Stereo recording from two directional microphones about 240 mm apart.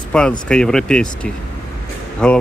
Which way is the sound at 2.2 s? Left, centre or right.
Centre.